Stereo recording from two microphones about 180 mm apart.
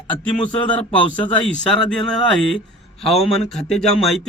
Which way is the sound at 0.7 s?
10° left (ahead or behind).